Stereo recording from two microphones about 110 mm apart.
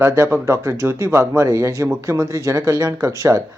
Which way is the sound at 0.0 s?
20° right (ahead or behind).